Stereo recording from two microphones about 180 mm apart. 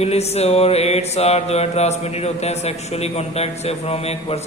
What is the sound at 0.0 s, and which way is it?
Mantra, 35° left (ahead or behind).